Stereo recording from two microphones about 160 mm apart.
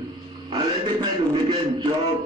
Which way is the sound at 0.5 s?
30° right (ahead or behind).